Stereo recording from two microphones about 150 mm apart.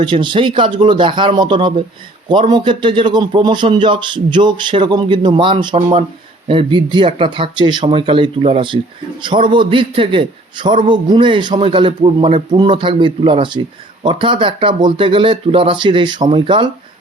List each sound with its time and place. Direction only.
0.0 s speech: 30° right (ahead or behind)